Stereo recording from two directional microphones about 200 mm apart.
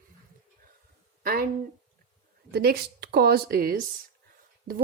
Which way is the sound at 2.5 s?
50° right (ahead or behind).